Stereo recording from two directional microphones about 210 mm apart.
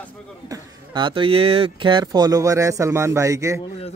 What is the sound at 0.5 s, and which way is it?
Speech, 20° right (ahead or behind).